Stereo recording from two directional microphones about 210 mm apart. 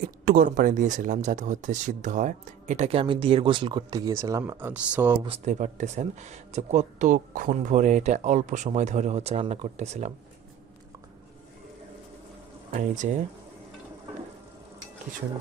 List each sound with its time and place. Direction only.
0.0 s speech: 40° right (ahead or behind); by 5.1 s 10° right (ahead or behind)
5.2 s speech: 30° right (ahead or behind)